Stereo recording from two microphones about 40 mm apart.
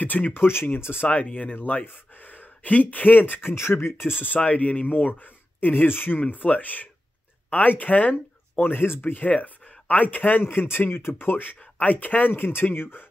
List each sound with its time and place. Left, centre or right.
0.0 s speech: left
0.4 s speech: left
1.1 s speech: left
4.5 s speech: left
6.1 s speech: left
9.3 s speech: left
10.4 s speech: left
11.8 s speech: left